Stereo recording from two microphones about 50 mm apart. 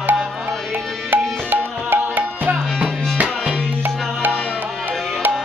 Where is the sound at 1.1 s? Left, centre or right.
Right.